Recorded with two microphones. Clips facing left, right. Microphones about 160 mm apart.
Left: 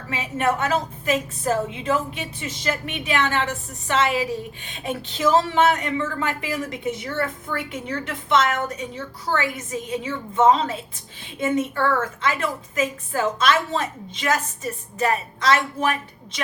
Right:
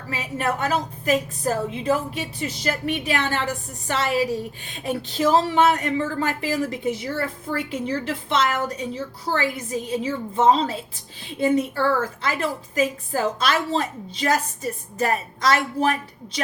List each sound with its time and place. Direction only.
0.1 s a woman's voice: 35° right (ahead or behind)